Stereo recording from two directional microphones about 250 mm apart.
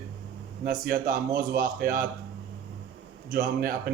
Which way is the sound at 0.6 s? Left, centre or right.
Right.